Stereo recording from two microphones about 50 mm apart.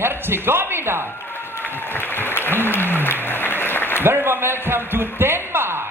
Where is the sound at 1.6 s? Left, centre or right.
Left.